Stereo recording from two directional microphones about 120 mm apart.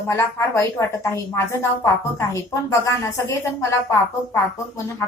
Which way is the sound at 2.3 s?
25° left (ahead or behind).